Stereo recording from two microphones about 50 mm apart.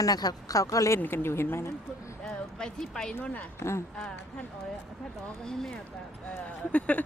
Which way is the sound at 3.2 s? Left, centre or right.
Left.